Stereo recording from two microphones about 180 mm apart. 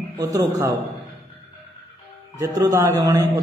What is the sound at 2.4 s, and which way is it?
Speech, 20° right (ahead or behind).